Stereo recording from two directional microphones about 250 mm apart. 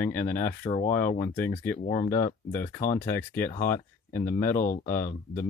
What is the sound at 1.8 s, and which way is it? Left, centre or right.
Speech, left.